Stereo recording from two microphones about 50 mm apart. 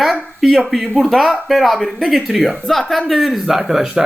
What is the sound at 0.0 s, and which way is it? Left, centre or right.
Speech, centre.